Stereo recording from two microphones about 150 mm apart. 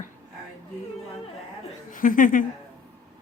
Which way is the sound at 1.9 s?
65° left (ahead or behind).